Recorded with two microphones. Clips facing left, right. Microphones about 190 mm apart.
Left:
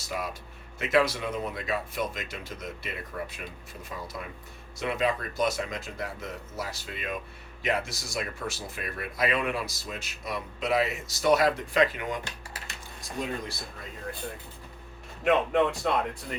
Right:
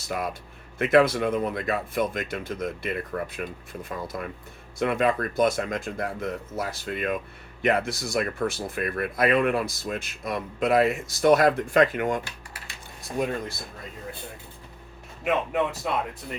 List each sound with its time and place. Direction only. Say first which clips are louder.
0.1 s speech: right 4 dB; 55° right (ahead or behind)
15.2 s a man's voice: left 2 dB; 5° right (ahead or behind)